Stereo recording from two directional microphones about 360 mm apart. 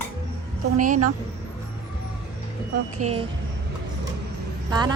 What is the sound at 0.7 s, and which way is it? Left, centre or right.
Speech, right.